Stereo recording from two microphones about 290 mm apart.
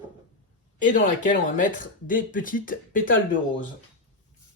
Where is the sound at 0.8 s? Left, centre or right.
Left.